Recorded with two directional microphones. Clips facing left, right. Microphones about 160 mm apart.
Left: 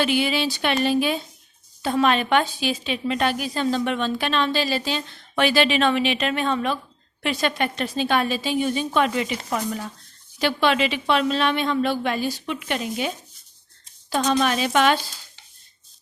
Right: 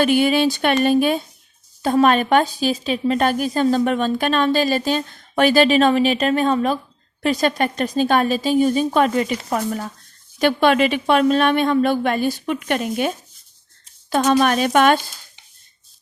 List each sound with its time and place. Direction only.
0.0 s speech: 50° right (ahead or behind)